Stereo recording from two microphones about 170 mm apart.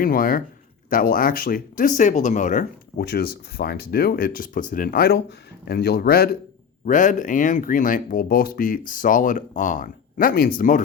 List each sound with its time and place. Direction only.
0.0 s speech: 55° left (ahead or behind)
3.0 s speech: 70° left (ahead or behind)
6.8 s speech: 50° left (ahead or behind)